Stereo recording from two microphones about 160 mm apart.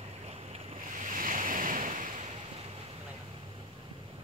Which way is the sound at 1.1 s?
60° right (ahead or behind).